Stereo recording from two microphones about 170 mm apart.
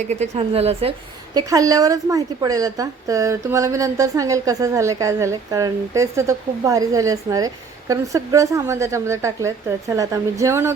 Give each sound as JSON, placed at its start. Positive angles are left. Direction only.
{"t": 0.1, "sound": "a woman's voice", "side_deg": -40}
{"t": 1.3, "sound": "a woman's voice", "side_deg": -20}